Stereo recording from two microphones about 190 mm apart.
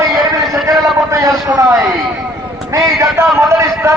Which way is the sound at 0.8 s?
15° right (ahead or behind).